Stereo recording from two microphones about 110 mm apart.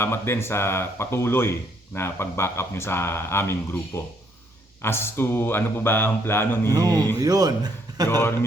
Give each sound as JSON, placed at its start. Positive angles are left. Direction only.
{"t": 0.0, "sound": "speech", "side_deg": 20}
{"t": 6.7, "sound": "a man's voice", "side_deg": -35}
{"t": 8.1, "sound": "speech", "side_deg": 20}